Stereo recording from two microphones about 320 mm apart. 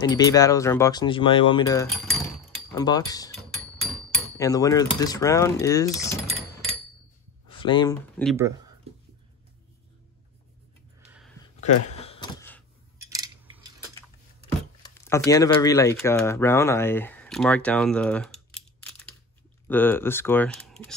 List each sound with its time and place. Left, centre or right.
0.0 s speech: centre
1.9 s keys jangling: centre
2.7 s speech: centre
3.5 s speech: centre
7.4 s speech: centre
8.2 s speech: centre
11.1 s a sound: centre
11.6 s a sound: centre
14.8 s speech: centre